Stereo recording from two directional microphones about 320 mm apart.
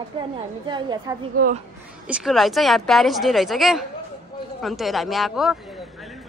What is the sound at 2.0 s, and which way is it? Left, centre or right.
A woman's voice, centre.